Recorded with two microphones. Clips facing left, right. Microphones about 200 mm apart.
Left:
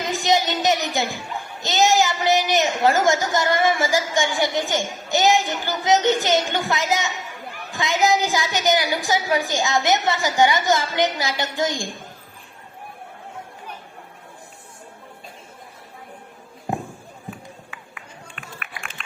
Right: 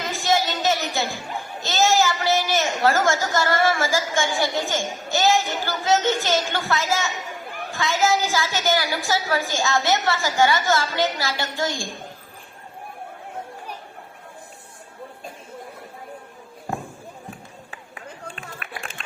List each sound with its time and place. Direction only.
0.0 s music: 20° left (ahead or behind)
1.6 s a child's voice: 15° left (ahead or behind)
17.7 s a sound: 35° right (ahead or behind)